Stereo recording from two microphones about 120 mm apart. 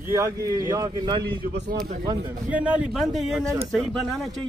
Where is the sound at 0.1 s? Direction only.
25° right (ahead or behind).